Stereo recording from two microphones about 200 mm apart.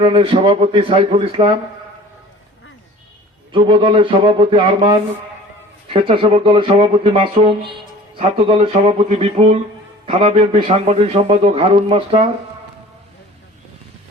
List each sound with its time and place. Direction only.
0.0 s a man's voice: 25° right (ahead or behind)
3.5 s a man's voice: 25° right (ahead or behind)